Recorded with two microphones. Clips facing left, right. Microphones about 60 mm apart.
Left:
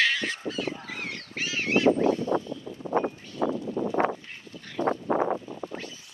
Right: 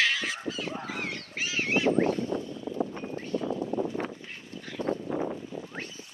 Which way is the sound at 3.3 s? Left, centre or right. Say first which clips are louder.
Left 2 dB; right.